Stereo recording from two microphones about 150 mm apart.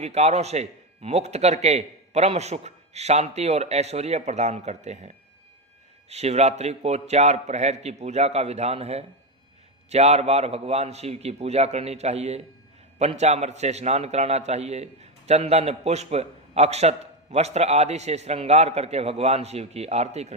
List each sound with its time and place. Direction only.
0.0 s a man's voice: 45° right (ahead or behind)